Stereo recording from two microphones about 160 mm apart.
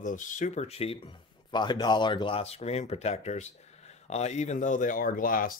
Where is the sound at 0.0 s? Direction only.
55° left (ahead or behind).